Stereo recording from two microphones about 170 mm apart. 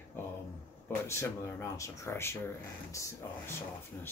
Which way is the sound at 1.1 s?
15° left (ahead or behind).